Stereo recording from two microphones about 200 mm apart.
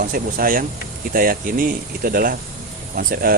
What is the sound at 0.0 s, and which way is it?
Speech, 45° right (ahead or behind).